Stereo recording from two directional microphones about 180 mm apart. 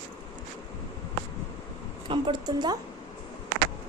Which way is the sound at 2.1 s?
25° right (ahead or behind).